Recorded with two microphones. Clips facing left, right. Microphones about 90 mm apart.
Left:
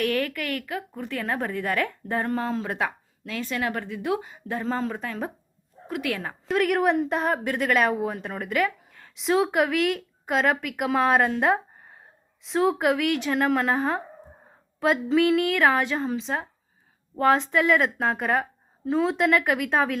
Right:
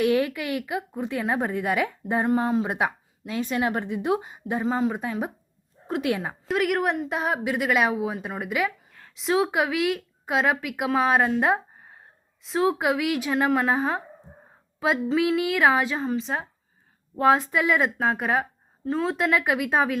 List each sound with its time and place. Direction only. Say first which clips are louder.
0.0 s a woman's voice: right 3 dB; 15° right (ahead or behind)
6.4 s speech: left 3 dB; centre (ahead or behind)